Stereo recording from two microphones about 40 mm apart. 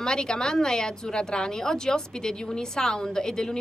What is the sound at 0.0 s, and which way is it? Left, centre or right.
Speech, centre.